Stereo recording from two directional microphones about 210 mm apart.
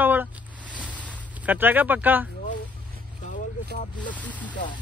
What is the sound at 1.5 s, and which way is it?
Speech, 10° right (ahead or behind).